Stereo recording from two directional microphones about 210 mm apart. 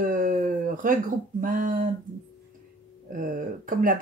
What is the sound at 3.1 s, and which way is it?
Speech, 40° right (ahead or behind).